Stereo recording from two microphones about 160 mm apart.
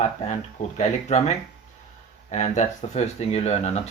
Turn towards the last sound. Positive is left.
turn(degrees=40)  # may be behind; listen again after turning